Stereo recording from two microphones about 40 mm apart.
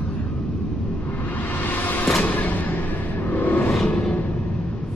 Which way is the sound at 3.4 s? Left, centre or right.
Left.